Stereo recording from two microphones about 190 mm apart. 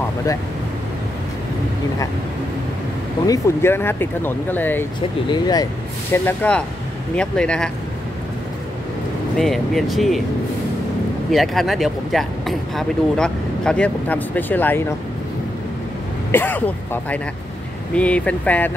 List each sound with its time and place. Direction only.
3.3 s speech: 15° left (ahead or behind)
9.4 s speech: centre (ahead or behind)
11.3 s speech: centre (ahead or behind)
16.3 s speech: 10° left (ahead or behind)